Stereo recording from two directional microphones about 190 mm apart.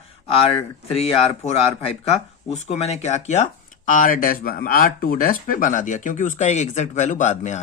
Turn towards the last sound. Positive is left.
turn(degrees=40)  # may be behind; listen again after turning